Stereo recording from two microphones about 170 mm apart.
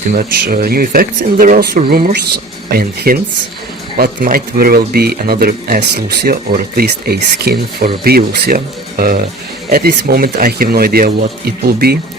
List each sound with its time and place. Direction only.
0.1 s speech: 55° right (ahead or behind)